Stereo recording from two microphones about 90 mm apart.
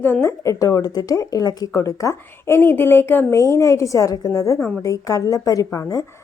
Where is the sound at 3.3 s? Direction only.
35° left (ahead or behind).